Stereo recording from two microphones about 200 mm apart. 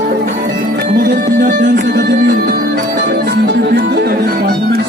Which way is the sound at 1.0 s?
45° right (ahead or behind).